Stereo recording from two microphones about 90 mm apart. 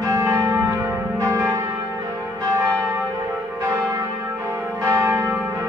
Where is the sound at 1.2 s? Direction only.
35° right (ahead or behind).